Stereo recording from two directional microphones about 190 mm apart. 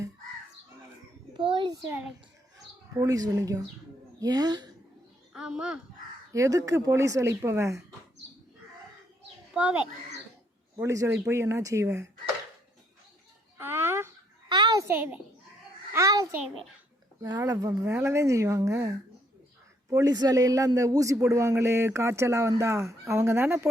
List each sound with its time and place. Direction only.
1.4 s speech: 25° right (ahead or behind)
2.9 s speech: 20° right (ahead or behind)
5.3 s a child's voice: 5° right (ahead or behind)
6.3 s a man's voice: 15° right (ahead or behind)
9.6 s a man's voice: 5° right (ahead or behind)
13.6 s a sound: 10° right (ahead or behind)
14.5 s a sound: 25° right (ahead or behind)
14.8 s a man's voice: 10° right (ahead or behind)